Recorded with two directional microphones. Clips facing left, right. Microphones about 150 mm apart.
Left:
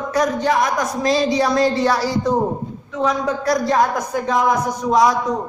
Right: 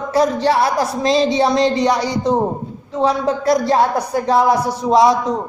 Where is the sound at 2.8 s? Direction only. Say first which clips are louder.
Right 3 dB; 35° right (ahead or behind).